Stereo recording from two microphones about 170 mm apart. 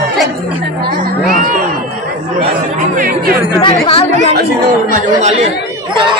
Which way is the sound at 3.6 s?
35° left (ahead or behind).